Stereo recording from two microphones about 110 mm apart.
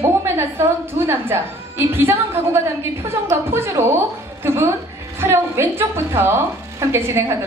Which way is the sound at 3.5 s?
25° right (ahead or behind).